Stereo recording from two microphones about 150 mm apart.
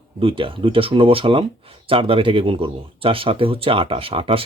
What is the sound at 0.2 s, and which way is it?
Speech, 35° right (ahead or behind).